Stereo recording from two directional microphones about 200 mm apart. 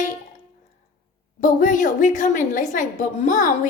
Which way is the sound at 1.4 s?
40° left (ahead or behind).